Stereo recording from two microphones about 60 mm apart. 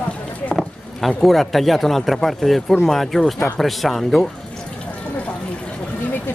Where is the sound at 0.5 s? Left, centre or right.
Centre.